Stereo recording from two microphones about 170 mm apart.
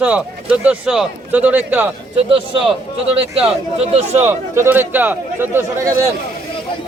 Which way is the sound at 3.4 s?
35° right (ahead or behind).